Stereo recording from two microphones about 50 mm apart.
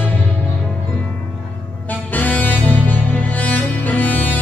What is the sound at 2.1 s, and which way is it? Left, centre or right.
Music, left.